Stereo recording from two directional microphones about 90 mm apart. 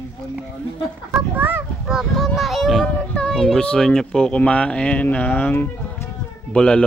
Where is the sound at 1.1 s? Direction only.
20° right (ahead or behind).